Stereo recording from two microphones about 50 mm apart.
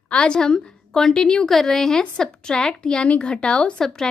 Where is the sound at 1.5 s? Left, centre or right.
Centre.